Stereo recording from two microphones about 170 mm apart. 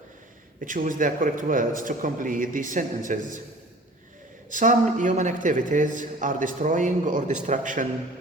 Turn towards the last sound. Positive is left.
turn(degrees=-45)  # may be behind; listen again after turning